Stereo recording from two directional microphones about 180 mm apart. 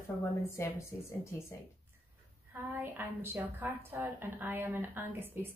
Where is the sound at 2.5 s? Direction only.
10° right (ahead or behind).